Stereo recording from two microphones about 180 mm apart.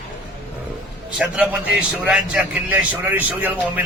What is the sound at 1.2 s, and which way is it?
A man's voice, 5° right (ahead or behind).